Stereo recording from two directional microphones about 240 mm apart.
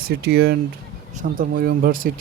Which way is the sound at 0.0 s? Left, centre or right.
Right.